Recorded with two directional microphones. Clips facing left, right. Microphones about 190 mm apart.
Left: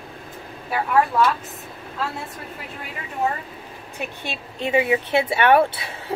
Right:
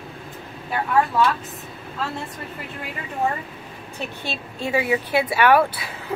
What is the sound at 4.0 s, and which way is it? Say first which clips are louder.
A woman's voice: right 1 dB; 20° left (ahead or behind).